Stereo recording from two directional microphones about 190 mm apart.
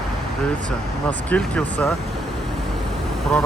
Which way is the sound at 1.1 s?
5° left (ahead or behind).